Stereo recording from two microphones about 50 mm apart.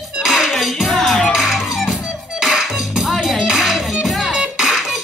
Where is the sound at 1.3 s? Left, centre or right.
Centre.